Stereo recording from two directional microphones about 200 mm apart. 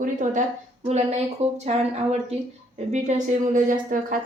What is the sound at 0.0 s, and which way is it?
A woman's voice, 40° right (ahead or behind).